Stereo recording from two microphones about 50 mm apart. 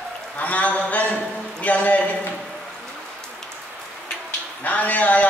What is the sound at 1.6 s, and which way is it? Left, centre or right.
Speech, left.